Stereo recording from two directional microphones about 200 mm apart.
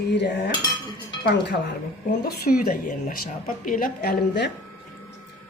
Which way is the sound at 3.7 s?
45° left (ahead or behind).